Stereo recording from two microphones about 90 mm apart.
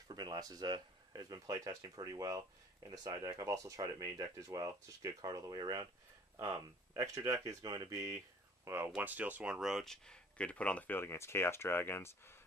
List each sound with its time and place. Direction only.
0.1 s speech: 45° right (ahead or behind)
8.6 s speech: 25° right (ahead or behind)
9.6 s speech: centre (ahead or behind); by 12.4 s 25° left (ahead or behind)